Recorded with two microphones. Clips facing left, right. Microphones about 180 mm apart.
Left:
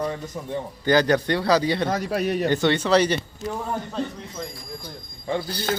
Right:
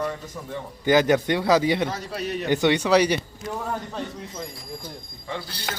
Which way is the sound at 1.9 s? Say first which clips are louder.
Left 6 dB; 55° left (ahead or behind).